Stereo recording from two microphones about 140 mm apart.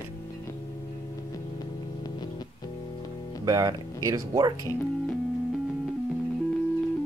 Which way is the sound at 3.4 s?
25° right (ahead or behind).